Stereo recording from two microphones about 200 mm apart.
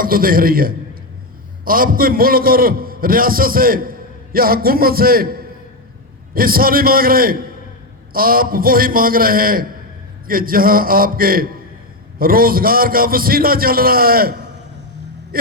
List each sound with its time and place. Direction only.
0.0 s a man's voice: 45° right (ahead or behind)